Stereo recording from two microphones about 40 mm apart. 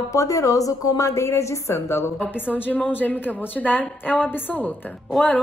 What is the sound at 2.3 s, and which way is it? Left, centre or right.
A woman's voice, left.